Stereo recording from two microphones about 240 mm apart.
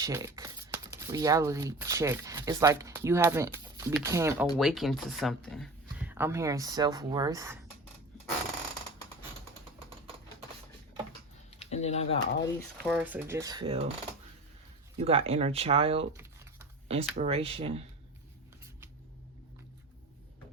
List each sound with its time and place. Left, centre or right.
0.0 s speech: centre
4.5 s speech: centre
11.5 s speech: left
12.8 s speech: centre; by 13.9 s right
14.9 s speech: right
16.1 s a sound: centre
16.9 s speech: right